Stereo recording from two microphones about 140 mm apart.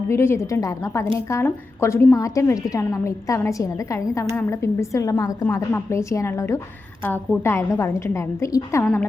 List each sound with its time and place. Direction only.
0.1 s a woman's voice: 20° left (ahead or behind)